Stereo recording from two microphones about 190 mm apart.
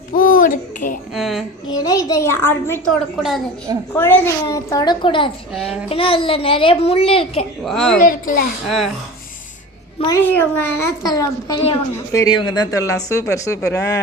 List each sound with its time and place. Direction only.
0.1 s a sound: 45° left (ahead or behind)
1.1 s a sound: centre (ahead or behind)
1.6 s a child's voice: 20° left (ahead or behind)
3.9 s a child's voice: 10° left (ahead or behind); by 7.4 s 30° left (ahead or behind)
7.6 s a woman's voice: centre (ahead or behind)
7.9 s a child's voice: 50° left (ahead or behind)
8.6 s a woman's voice: centre (ahead or behind)
10.2 s a child's voice: 10° left (ahead or behind)